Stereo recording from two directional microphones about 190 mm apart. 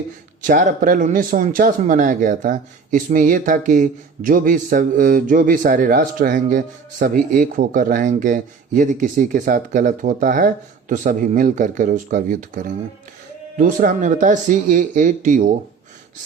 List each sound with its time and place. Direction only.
0.4 s speech: 40° right (ahead or behind)